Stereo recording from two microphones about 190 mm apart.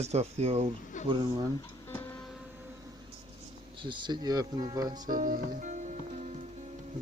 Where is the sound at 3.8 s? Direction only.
25° right (ahead or behind).